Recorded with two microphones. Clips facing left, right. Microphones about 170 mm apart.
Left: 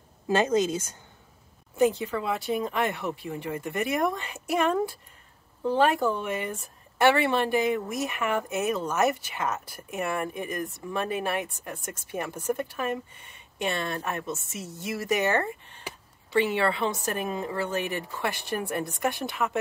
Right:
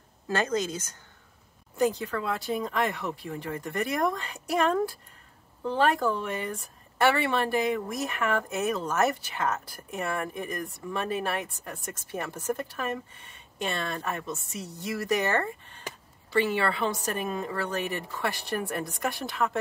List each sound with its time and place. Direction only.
0.3 s a woman's voice: 20° left (ahead or behind)
1.8 s speech: 5° left (ahead or behind)